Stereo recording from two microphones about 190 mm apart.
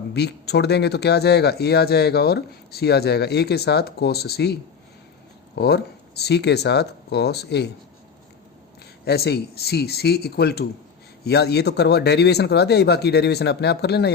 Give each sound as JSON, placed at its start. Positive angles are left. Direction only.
{"t": 0.1, "sound": "speech", "side_deg": 60}
{"t": 5.5, "sound": "speech", "side_deg": 60}
{"t": 9.0, "sound": "speech", "side_deg": 55}